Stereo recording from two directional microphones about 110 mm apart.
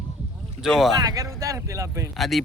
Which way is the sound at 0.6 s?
5° right (ahead or behind).